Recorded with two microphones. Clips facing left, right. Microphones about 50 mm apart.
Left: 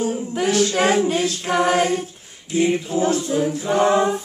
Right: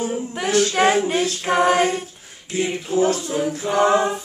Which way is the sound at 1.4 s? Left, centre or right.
Centre.